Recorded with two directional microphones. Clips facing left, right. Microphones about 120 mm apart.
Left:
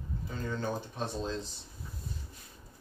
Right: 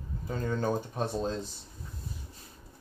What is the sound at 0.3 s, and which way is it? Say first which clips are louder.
Speech: right 5 dB; 45° right (ahead or behind).